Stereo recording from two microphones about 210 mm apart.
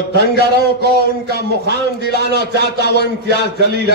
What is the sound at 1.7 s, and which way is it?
Speech, 50° left (ahead or behind).